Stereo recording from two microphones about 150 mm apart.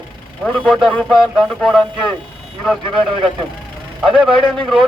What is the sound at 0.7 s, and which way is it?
Speech, 5° right (ahead or behind).